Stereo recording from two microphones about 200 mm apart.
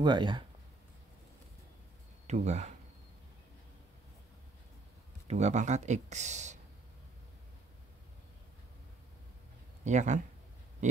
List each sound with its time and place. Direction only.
0.0 s speech: 20° right (ahead or behind)
2.2 s speech: 35° right (ahead or behind)
5.3 s speech: 35° right (ahead or behind)
9.8 s speech: 35° right (ahead or behind)